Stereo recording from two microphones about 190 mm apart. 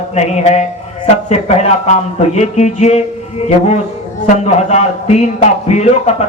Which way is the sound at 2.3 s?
35° left (ahead or behind).